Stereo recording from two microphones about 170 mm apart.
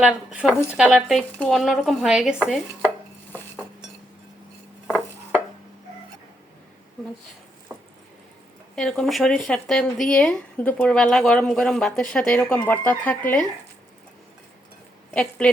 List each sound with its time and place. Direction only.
0.0 s speech: 5° right (ahead or behind)
4.9 s dishes: 5° left (ahead or behind)
8.7 s speech: 5° left (ahead or behind)
15.1 s speech: 5° left (ahead or behind)